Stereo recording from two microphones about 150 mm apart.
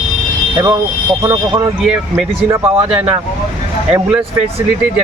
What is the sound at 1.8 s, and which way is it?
Speech, 5° right (ahead or behind).